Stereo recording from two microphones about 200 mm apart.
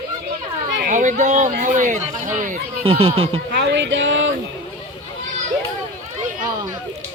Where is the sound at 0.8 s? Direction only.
40° right (ahead or behind).